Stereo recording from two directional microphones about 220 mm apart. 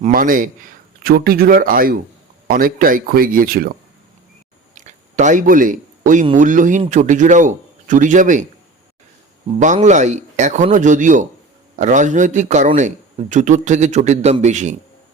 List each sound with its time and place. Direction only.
0.0 s speech: 40° right (ahead or behind)
4.7 s a sound: 35° right (ahead or behind)
6.2 s speech: 35° right (ahead or behind)
9.6 s speech: 35° right (ahead or behind)